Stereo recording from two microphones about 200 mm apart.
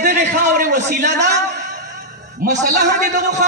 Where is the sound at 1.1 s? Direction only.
60° right (ahead or behind).